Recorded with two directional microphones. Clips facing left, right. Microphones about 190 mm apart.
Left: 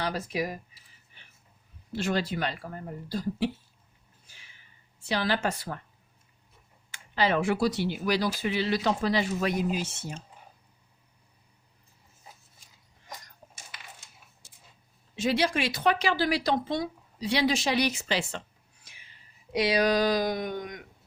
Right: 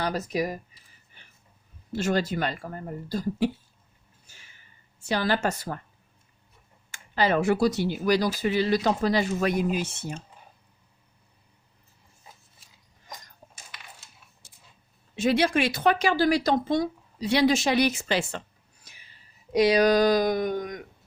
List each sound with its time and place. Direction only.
0.0 s speech: 40° right (ahead or behind)
1.2 s a sound: 40° right (ahead or behind)
1.9 s speech: 45° right (ahead or behind)
5.0 s speech: 45° right (ahead or behind)
6.9 s speech: 45° right (ahead or behind)
15.1 s speech: 55° right (ahead or behind)